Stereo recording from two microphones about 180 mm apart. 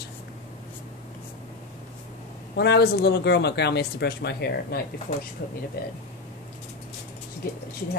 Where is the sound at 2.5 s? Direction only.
65° left (ahead or behind).